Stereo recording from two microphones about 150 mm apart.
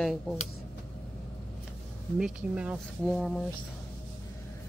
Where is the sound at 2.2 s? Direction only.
5° right (ahead or behind).